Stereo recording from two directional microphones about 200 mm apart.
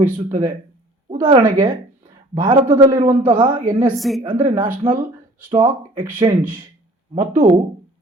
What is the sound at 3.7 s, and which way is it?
Speech, centre (ahead or behind).